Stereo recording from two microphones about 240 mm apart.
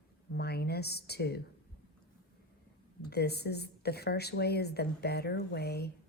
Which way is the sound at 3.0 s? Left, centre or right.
Left.